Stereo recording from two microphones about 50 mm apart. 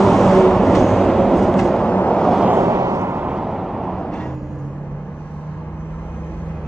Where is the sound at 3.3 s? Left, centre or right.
Centre.